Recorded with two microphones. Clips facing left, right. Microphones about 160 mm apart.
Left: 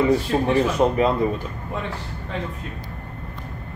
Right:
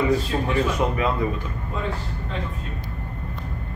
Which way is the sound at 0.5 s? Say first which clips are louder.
Left 4 dB; 30° left (ahead or behind).